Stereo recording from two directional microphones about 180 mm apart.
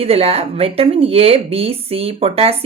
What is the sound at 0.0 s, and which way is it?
Speech, 35° right (ahead or behind).